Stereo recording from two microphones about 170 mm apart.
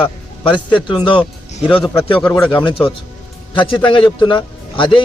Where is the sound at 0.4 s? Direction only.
30° left (ahead or behind).